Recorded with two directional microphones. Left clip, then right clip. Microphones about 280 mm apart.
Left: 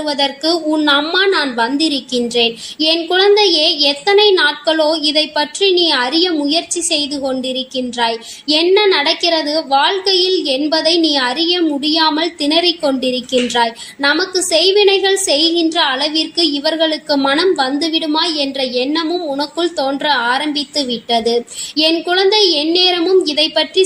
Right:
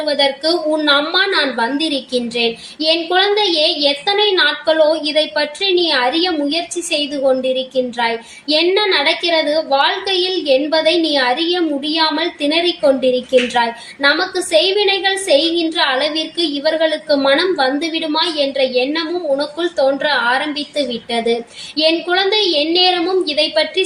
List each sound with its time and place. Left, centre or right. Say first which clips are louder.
0.0 s a woman's voice: right 1 dB; left